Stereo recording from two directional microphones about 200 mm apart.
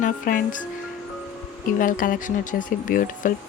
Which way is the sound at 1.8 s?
40° left (ahead or behind).